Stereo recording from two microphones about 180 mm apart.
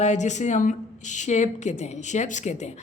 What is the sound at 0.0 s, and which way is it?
A man's voice, 40° left (ahead or behind).